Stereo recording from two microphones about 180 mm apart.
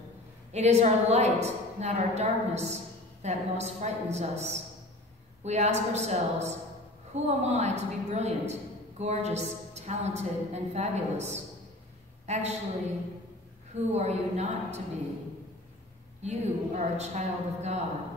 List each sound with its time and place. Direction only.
0.5 s a woman's voice: 35° right (ahead or behind)
13.7 s a woman's voice: 40° right (ahead or behind)
16.2 s a woman's voice: 40° right (ahead or behind)